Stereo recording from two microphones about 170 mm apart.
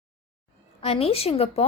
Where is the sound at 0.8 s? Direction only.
35° left (ahead or behind).